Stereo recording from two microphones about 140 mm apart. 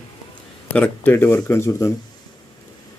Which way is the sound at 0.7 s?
10° left (ahead or behind).